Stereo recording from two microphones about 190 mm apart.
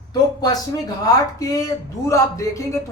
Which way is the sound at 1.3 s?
15° left (ahead or behind).